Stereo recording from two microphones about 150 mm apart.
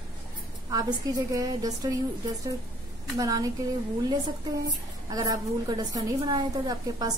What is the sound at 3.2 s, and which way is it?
Speech, 25° right (ahead or behind).